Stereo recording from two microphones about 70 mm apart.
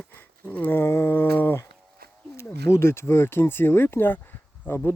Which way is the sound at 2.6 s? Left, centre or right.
Left.